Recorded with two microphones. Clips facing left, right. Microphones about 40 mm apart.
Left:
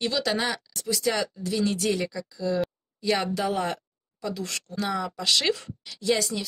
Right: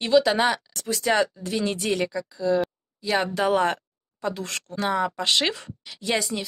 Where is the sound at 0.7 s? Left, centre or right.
Right.